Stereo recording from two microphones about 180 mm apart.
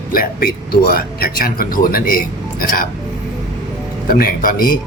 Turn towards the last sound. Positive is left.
turn(degrees=50)  # may be behind; listen again after turning